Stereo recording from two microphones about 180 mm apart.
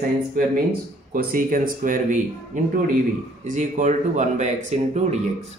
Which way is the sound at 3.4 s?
45° right (ahead or behind).